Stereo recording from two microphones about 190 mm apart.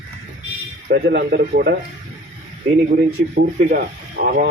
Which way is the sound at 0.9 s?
55° right (ahead or behind).